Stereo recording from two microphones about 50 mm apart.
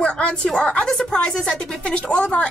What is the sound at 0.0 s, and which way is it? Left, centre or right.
A woman's voice, centre.